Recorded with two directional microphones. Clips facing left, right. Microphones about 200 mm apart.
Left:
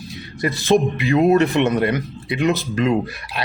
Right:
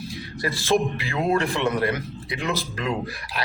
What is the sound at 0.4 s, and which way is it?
Speech, 20° left (ahead or behind).